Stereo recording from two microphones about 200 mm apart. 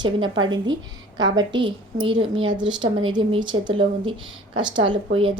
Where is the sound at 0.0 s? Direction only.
25° right (ahead or behind).